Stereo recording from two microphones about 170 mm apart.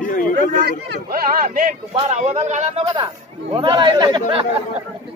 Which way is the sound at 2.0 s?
40° right (ahead or behind).